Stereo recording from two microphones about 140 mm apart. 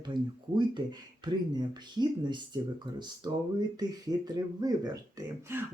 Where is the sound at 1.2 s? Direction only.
30° right (ahead or behind).